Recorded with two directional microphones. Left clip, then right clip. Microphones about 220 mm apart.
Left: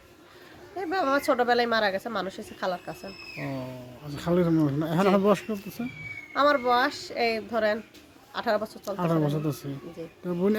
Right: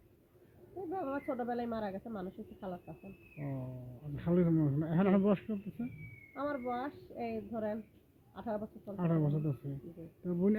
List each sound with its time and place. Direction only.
0.9 s a woman's voice: 15° left (ahead or behind)
4.1 s a woman's voice: 20° left (ahead or behind)